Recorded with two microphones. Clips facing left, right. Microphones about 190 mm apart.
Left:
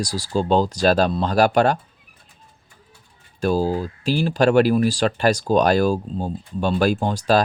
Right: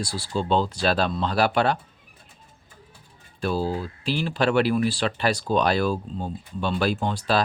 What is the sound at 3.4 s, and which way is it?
Speech, 40° left (ahead or behind).